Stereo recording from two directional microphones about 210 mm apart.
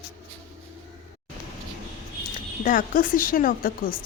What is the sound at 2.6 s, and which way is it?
A woman's voice, 40° left (ahead or behind).